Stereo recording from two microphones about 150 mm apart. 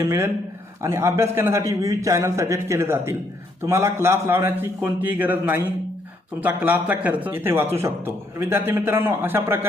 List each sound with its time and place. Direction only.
0.0 s a man's voice: 15° right (ahead or behind)